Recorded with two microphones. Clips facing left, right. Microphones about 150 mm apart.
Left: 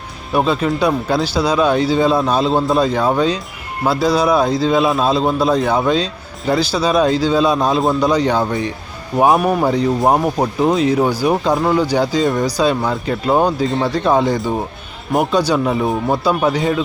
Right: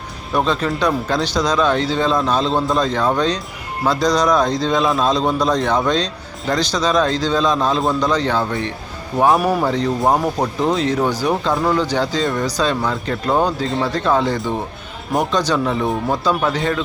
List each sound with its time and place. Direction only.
0.3 s speech: 10° left (ahead or behind)